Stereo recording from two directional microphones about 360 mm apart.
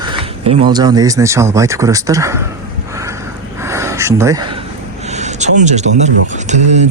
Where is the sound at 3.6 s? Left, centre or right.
Centre.